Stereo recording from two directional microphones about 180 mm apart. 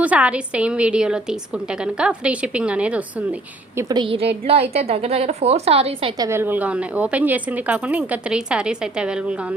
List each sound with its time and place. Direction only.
0.0 s a woman's voice: 10° right (ahead or behind)
3.8 s a woman's voice: 20° right (ahead or behind)
6.2 s a woman's voice: 15° right (ahead or behind)